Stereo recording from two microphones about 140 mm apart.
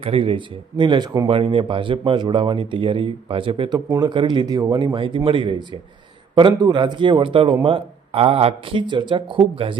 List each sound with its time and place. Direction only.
0.0 s a man's voice: 40° right (ahead or behind)
1.3 s a man's voice: 40° right (ahead or behind)
3.8 s speech: 25° right (ahead or behind)
4.1 s a man's voice: 35° right (ahead or behind)